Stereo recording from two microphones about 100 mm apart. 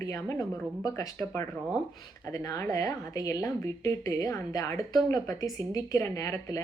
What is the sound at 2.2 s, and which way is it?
A woman's voice, 35° left (ahead or behind).